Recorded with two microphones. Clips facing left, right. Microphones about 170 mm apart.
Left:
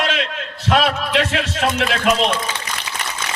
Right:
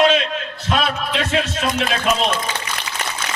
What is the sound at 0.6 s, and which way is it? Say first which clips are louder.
A man's voice: left 4 dB; 70° left (ahead or behind).